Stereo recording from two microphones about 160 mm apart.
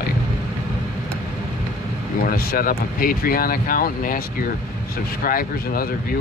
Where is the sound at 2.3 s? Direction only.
65° left (ahead or behind).